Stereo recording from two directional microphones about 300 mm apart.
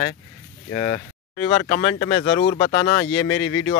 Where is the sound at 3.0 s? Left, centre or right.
Left.